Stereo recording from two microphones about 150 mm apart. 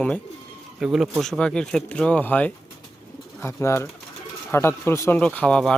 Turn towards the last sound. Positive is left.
turn(degrees=5)  # may be behind; listen again after turning